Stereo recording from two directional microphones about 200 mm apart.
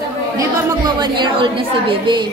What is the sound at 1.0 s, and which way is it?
A woman's voice, 25° right (ahead or behind).